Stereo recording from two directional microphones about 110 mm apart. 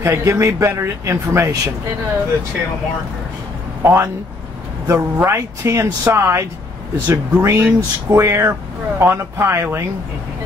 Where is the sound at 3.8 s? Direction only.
25° right (ahead or behind).